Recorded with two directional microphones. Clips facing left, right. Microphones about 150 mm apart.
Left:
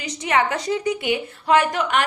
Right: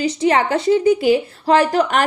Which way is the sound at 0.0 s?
30° right (ahead or behind).